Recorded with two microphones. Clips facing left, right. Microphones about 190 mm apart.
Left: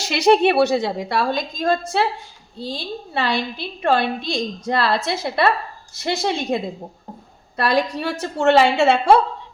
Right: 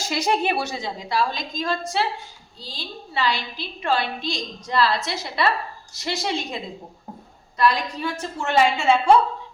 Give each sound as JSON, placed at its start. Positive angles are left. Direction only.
{"t": 0.0, "sound": "a woman's voice", "side_deg": 70}
{"t": 7.5, "sound": "a woman's voice", "side_deg": 65}